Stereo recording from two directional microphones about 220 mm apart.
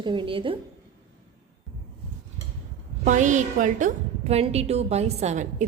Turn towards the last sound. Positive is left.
turn(degrees=-30)  # may be behind; listen again after turning